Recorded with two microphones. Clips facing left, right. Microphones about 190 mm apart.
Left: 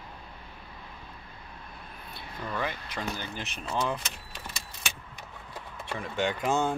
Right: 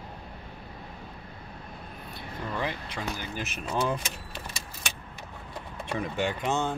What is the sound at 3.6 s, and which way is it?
Speech, 15° right (ahead or behind).